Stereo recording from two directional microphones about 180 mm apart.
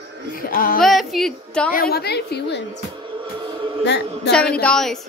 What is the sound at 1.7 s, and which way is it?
Speech, 60° left (ahead or behind).